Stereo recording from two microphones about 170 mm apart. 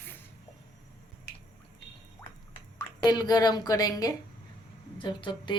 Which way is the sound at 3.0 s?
25° left (ahead or behind).